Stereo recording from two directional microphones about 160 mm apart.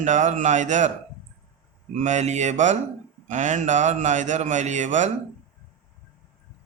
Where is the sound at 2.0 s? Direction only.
45° right (ahead or behind).